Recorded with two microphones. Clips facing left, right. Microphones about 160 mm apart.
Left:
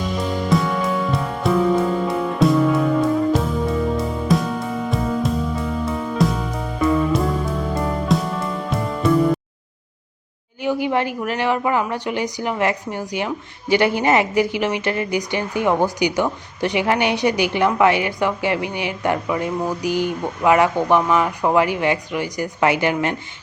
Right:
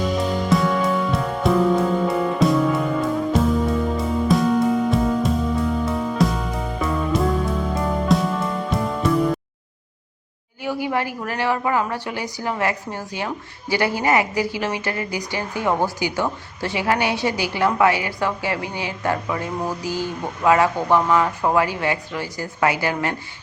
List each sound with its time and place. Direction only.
0.0 s music: centre (ahead or behind)
10.6 s a woman's voice: 20° left (ahead or behind)